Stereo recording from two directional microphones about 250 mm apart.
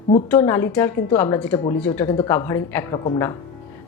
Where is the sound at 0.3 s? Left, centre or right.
Centre.